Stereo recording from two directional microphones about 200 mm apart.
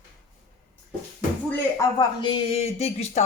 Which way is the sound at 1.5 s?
20° left (ahead or behind).